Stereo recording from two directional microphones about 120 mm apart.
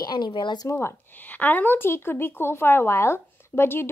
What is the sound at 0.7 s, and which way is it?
A woman's voice, 20° left (ahead or behind).